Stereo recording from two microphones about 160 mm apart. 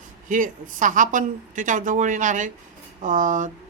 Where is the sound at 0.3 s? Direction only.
55° right (ahead or behind).